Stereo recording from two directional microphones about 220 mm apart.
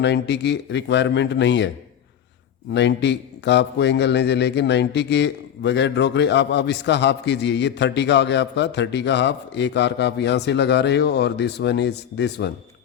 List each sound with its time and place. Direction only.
0.0 s a man's voice: 50° left (ahead or behind)
2.7 s a man's voice: 50° left (ahead or behind)